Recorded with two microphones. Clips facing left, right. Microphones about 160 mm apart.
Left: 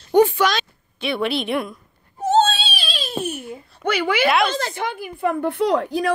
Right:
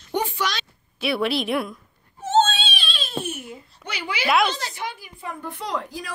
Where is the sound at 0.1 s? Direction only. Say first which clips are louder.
Left 10 dB; 55° left (ahead or behind).